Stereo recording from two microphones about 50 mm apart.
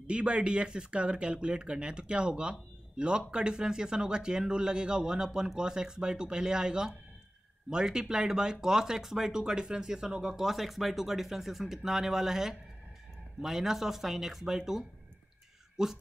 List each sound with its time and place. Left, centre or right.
0.0 s speech: right